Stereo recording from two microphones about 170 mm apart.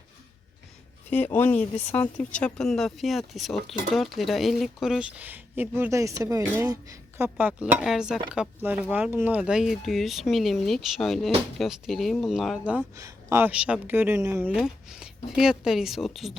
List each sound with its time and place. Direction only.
1.1 s speech: 10° left (ahead or behind); by 12.8 s 5° right (ahead or behind)
13.0 s speech: 15° right (ahead or behind)
14.5 s speech: 5° right (ahead or behind)